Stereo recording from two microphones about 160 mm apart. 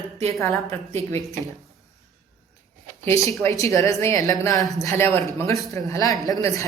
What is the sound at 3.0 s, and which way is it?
A man's voice, 20° left (ahead or behind).